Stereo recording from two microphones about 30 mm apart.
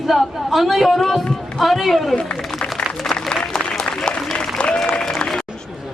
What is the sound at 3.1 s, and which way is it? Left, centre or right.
Applause, left.